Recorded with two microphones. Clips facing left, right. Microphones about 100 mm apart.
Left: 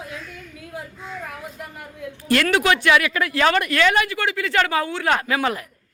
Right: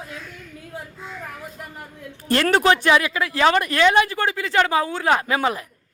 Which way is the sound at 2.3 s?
35° right (ahead or behind).